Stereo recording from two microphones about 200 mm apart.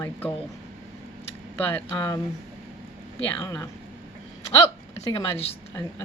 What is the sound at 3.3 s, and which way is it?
Speech, 15° left (ahead or behind).